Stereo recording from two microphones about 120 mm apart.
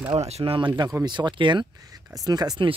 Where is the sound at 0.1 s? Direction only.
65° right (ahead or behind).